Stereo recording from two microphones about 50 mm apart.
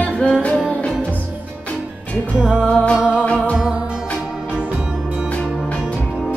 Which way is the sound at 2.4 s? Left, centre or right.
Centre.